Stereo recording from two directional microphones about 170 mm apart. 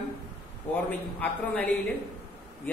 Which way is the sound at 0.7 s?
10° left (ahead or behind).